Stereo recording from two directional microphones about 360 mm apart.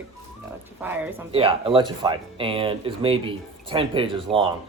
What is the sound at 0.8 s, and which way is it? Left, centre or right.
A man's voice, centre.